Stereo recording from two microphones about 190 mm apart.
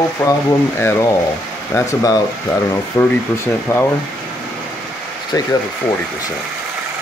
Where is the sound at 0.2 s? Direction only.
15° left (ahead or behind).